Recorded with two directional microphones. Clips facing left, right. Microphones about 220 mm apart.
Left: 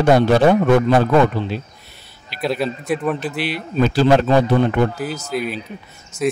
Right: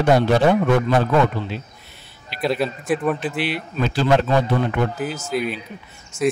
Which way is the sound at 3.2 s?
40° left (ahead or behind).